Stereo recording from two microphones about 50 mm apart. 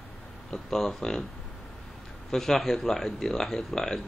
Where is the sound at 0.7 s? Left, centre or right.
Centre.